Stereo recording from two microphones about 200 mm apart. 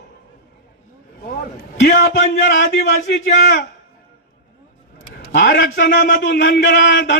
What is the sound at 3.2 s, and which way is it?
Speech, 55° left (ahead or behind).